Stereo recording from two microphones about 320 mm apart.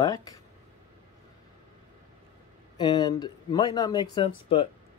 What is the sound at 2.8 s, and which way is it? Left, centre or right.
Speech, centre.